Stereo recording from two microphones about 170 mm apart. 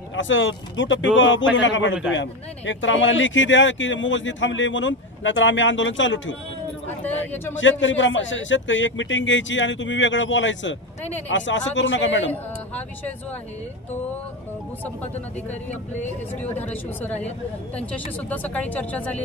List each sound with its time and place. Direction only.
0.1 s speech: 90° left
7.8 s speech: 90° left
12.3 s speech: 10° left (ahead or behind)
17.0 s speech: 10° left (ahead or behind)